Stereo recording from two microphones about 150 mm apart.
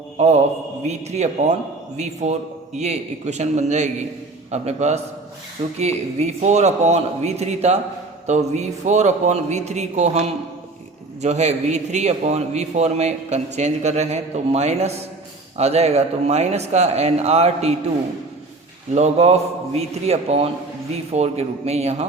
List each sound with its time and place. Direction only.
0.2 s a man's voice: 50° right (ahead or behind)
2.7 s a man's voice: 50° right (ahead or behind)
18.9 s a man's voice: 45° right (ahead or behind)